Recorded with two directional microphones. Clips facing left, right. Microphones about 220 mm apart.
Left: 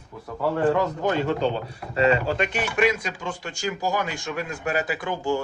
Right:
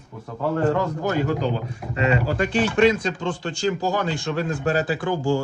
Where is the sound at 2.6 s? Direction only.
10° left (ahead or behind).